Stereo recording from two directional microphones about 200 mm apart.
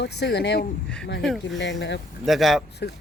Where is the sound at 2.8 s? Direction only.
60° left (ahead or behind).